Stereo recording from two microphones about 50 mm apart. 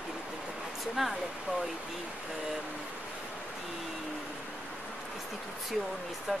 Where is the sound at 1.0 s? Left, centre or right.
Centre.